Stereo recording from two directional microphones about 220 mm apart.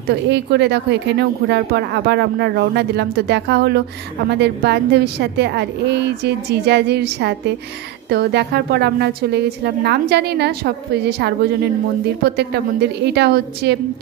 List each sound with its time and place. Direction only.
0.3 s speech: 50° right (ahead or behind)
12.4 s speech: 50° right (ahead or behind)